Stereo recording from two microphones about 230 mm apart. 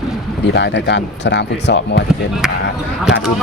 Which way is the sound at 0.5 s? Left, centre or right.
Left.